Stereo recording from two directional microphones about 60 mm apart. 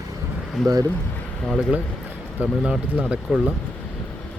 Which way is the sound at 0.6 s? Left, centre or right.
Right.